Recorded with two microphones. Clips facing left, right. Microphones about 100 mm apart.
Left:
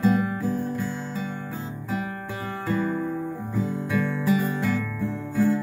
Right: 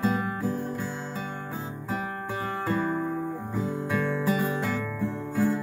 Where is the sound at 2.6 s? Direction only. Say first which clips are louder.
Left 2 dB; 25° right (ahead or behind).